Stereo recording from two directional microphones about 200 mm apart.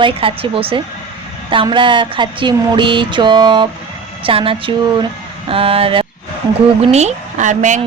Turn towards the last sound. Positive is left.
turn(degrees=-40)  # may be behind; listen again after turning